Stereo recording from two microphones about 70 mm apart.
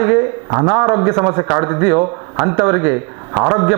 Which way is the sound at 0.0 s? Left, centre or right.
Right.